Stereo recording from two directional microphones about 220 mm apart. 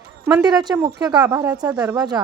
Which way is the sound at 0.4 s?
20° right (ahead or behind).